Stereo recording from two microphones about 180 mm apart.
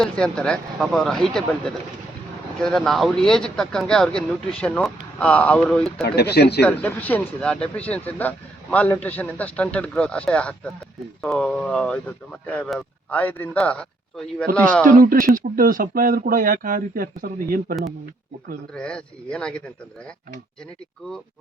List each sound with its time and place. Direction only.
0.0 s speech: 5° left (ahead or behind)
6.0 s speech: 65° left (ahead or behind)
6.6 s speech: 10° left (ahead or behind)
15.0 s speech: 50° right (ahead or behind)
18.7 s speech: 5° left (ahead or behind)